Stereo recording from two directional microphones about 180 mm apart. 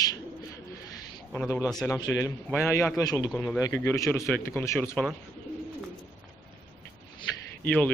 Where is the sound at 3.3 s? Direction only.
5° left (ahead or behind).